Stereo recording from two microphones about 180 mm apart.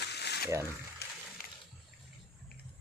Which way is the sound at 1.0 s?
65° left (ahead or behind).